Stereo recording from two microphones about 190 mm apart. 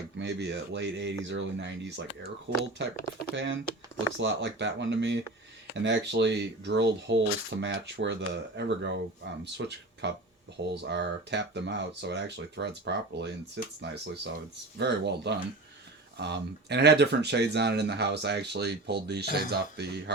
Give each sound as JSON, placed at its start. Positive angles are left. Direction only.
{"t": 0.2, "sound": "speech", "side_deg": -65}